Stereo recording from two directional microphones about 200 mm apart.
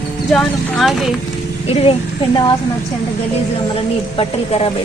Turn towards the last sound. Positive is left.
turn(degrees=30)  # may be behind; listen again after turning